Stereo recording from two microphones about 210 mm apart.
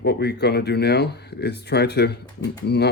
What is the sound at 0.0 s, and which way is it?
Speech, 50° left (ahead or behind).